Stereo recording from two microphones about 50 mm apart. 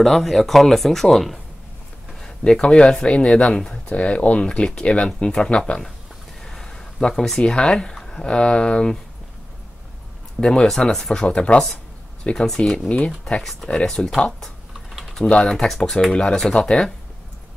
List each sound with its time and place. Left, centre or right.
0.0 s speech: centre
2.1 s speech: centre
3.5 s speech: left
6.4 s a sound: centre
7.2 s speech: centre
8.3 s speech: centre
10.4 s speech: centre
11.2 s speech: centre
12.4 s speech: centre
13.2 s speech: centre
13.7 s speech: centre
14.7 s typing: centre
15.2 s speech: centre